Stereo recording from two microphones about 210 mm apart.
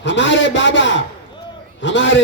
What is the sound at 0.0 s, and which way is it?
A man's voice, 60° left (ahead or behind).